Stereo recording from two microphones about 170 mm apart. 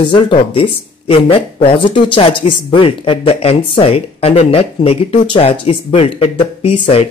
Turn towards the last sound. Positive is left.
turn(degrees=35)  # may be behind; listen again after turning